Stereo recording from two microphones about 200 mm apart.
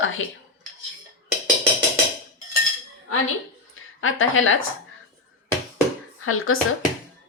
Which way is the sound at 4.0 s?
85° left.